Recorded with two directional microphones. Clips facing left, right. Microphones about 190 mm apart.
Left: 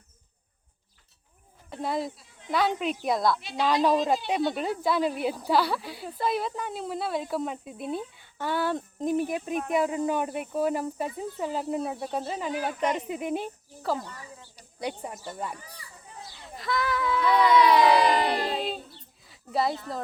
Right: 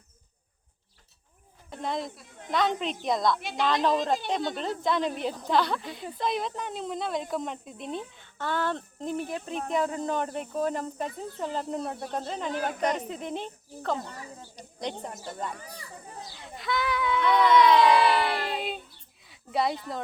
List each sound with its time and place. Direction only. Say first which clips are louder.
1.8 s speech: left 2 dB; 5° left (ahead or behind)
2.1 s speech: right 7 dB; 55° right (ahead or behind)
2.5 s speech: left 1 dB; 5° left (ahead or behind)
14.5 s snake: left 1 dB; 10° left (ahead or behind)
16.3 s speech: left 1 dB; centre (ahead or behind)
17.9 s a sound: left 1 dB; 40° left (ahead or behind)
19.2 s speech: left 1 dB; centre (ahead or behind)